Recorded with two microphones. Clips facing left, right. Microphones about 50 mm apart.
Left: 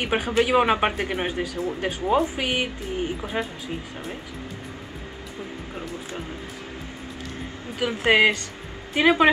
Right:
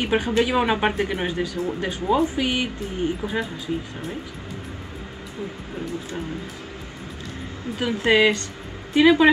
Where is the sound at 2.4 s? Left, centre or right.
Left.